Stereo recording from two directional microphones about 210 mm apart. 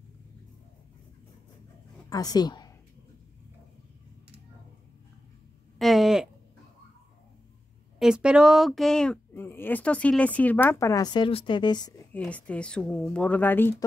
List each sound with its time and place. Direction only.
2.0 s a woman's voice: 15° left (ahead or behind)
5.8 s a sound: centre (ahead or behind)
8.0 s speech: 5° right (ahead or behind); by 11.9 s 20° left (ahead or behind)
12.1 s speech: 5° left (ahead or behind)